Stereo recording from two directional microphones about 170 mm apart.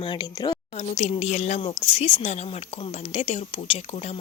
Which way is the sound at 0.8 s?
40° left (ahead or behind).